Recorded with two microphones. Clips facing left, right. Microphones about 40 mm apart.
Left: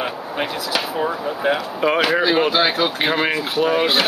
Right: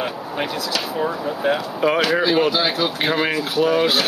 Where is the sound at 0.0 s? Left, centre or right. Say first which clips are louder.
Left 1 dB; centre.